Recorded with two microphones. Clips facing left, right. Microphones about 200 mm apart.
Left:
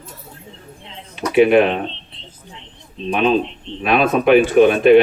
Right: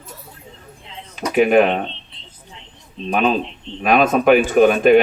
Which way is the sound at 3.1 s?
40° right (ahead or behind).